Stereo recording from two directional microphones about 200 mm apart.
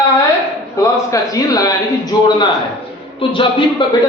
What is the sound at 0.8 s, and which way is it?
A man's voice, 15° left (ahead or behind).